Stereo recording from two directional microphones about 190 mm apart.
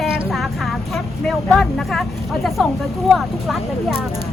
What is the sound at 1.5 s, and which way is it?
Speech, centre (ahead or behind).